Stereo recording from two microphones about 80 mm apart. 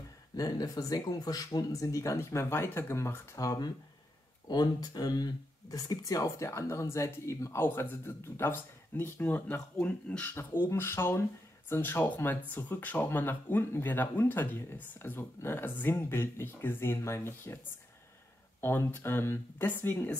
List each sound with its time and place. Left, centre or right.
0.4 s speech: left
6.2 s speech: left; by 10.3 s centre
10.3 s speech: left
18.6 s speech: left